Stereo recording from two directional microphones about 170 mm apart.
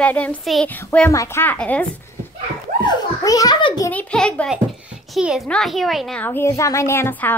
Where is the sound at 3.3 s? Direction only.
20° left (ahead or behind).